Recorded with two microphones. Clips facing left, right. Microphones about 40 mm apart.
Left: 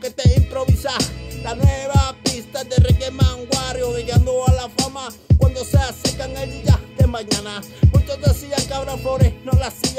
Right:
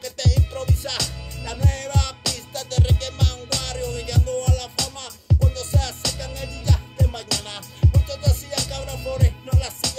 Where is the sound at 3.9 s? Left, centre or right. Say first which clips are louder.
Left 5 dB; left.